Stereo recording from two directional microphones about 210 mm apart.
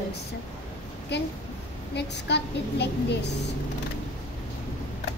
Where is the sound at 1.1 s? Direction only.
55° left (ahead or behind).